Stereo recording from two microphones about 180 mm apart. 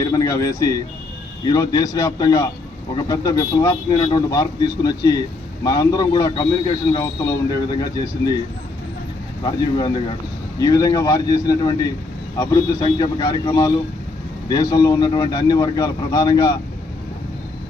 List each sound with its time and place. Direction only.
0.0 s a man's voice: 20° left (ahead or behind)
9.4 s a man's voice: 25° left (ahead or behind)